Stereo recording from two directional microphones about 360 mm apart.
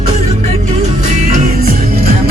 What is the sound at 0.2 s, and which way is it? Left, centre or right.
Music, centre.